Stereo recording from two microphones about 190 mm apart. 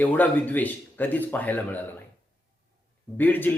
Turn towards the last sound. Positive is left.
turn(degrees=10)  # may be behind; listen again after turning